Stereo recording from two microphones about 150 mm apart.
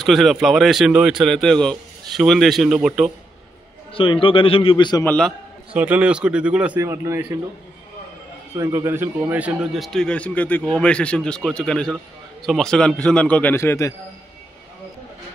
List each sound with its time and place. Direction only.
0.0 s speech: centre (ahead or behind)
3.9 s a man's voice: 35° left (ahead or behind)
5.0 s speech: 5° left (ahead or behind)
5.7 s speech: 10° right (ahead or behind)
6.8 s a man's voice: 20° right (ahead or behind)
8.5 s a man's voice: 20° right (ahead or behind); by 13.9 s 20° left (ahead or behind)